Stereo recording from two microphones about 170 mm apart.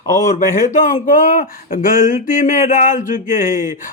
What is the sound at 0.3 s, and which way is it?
Speech, 45° left (ahead or behind).